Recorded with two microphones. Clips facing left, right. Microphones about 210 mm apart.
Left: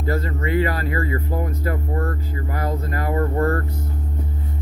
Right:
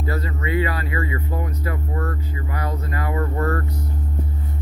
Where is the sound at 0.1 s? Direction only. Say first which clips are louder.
Left 3 dB; 45° left (ahead or behind).